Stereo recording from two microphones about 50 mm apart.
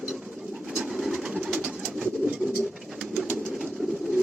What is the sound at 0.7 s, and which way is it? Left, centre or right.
Bird, centre.